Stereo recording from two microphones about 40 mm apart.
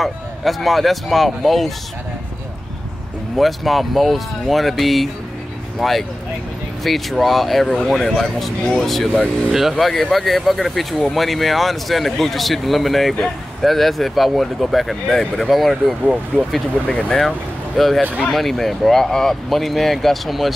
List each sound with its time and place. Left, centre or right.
0.0 s speech: centre
3.3 s speech: centre
16.8 s speech: left
17.7 s speech: centre